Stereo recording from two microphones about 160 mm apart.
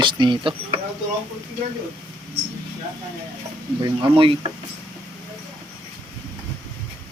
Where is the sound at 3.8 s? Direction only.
35° right (ahead or behind).